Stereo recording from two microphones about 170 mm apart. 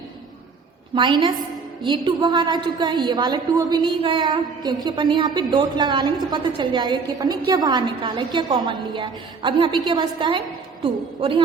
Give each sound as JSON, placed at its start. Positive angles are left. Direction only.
{"t": 0.9, "sound": "a woman's voice", "side_deg": -25}